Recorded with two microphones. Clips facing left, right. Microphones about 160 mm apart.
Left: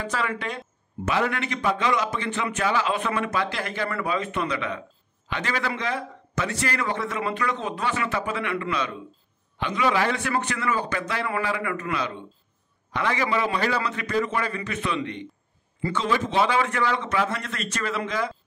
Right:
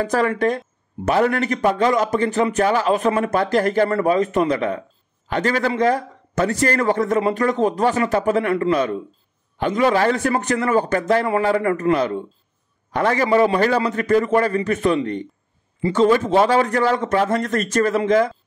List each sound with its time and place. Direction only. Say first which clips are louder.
0.0 s a man's voice: right 10 dB; 45° right (ahead or behind)
11.2 s a man's voice: right 8 dB; 30° right (ahead or behind)
11.5 s a man's voice: right 10 dB; 40° right (ahead or behind)